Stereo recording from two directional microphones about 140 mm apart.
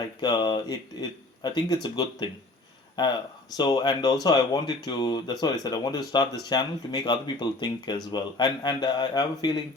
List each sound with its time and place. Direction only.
0.2 s speech: 30° left (ahead or behind)